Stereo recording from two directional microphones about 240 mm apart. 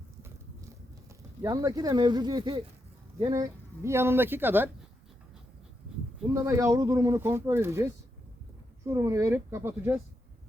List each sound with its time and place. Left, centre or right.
1.4 s speech: centre
6.3 s speech: centre